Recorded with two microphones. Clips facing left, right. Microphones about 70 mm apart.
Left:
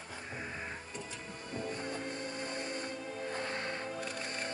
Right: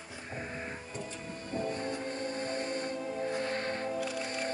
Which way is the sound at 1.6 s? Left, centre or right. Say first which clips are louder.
Right 3 dB; right.